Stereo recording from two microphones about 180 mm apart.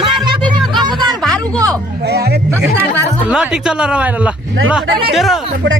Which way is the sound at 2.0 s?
65° right (ahead or behind).